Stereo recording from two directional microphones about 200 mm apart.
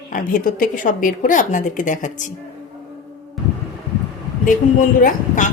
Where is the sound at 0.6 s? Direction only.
40° left (ahead or behind).